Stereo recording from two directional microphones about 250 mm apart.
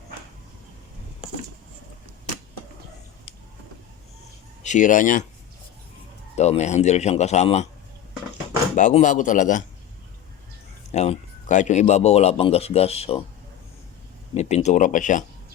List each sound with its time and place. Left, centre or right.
4.6 s speech: left
6.3 s speech: left
8.7 s speech: left
10.9 s speech: left
14.3 s speech: left